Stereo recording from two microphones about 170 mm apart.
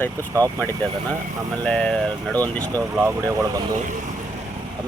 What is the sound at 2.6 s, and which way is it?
Speech, 20° right (ahead or behind).